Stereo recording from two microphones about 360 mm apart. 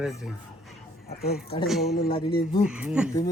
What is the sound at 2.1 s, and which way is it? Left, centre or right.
Speech, centre.